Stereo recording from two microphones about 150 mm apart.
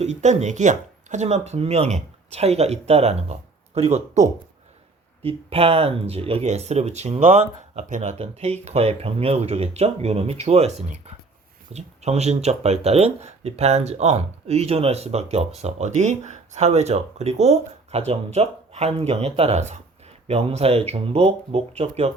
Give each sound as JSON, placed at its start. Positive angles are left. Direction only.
{"t": 0.0, "sound": "speech", "side_deg": -50}